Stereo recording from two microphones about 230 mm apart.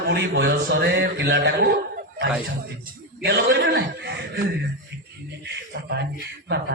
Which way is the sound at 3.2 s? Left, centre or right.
Right.